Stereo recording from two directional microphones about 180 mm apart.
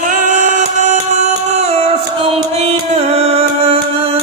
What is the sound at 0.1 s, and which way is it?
Music, 45° right (ahead or behind).